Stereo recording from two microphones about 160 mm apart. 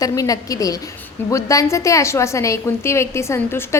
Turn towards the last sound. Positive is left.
turn(degrees=15)  # may be behind; listen again after turning